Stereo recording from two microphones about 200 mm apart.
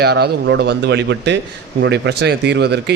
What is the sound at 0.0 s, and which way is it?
A man's voice, 55° right (ahead or behind).